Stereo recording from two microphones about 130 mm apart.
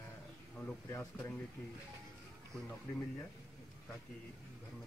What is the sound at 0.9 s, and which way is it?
Speech, 20° left (ahead or behind).